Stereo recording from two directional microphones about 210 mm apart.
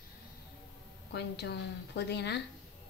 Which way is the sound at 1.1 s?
50° left (ahead or behind).